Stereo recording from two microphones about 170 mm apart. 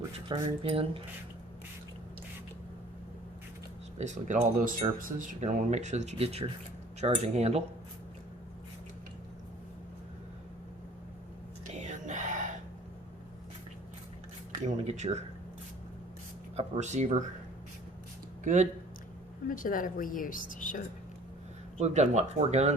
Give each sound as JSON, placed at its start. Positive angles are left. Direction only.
{"t": 0.3, "sound": "speech", "side_deg": -30}
{"t": 3.9, "sound": "speech", "side_deg": -40}
{"t": 11.7, "sound": "a sound", "side_deg": -45}
{"t": 14.6, "sound": "speech", "side_deg": -45}
{"t": 16.6, "sound": "speech", "side_deg": -40}
{"t": 18.4, "sound": "speech", "side_deg": -45}
{"t": 19.5, "sound": "speech", "side_deg": 55}
{"t": 21.8, "sound": "speech", "side_deg": -40}